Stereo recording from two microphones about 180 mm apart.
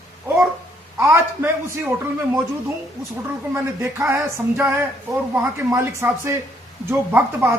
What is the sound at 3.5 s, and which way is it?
Speech, 15° right (ahead or behind).